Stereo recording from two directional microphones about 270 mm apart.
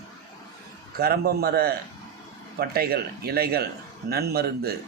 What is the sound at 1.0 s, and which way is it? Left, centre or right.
A man's voice, right.